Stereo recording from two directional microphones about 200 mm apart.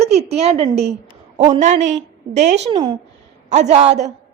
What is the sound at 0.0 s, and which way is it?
A woman's voice, 30° right (ahead or behind).